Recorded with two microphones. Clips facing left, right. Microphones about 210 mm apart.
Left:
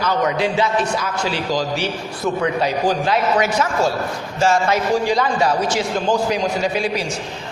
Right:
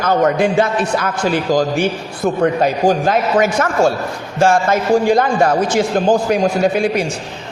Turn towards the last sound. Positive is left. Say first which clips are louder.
# right 6 dB
turn(degrees=-55)  # may be behind; listen again after turning